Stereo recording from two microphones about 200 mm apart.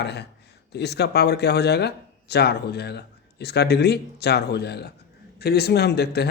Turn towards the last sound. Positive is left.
turn(degrees=55)  # may be behind; listen again after turning